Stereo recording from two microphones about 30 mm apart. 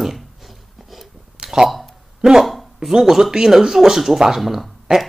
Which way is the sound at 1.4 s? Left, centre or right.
Centre.